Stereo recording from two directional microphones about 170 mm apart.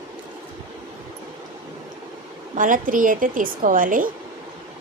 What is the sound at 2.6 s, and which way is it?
A woman's voice, 50° right (ahead or behind).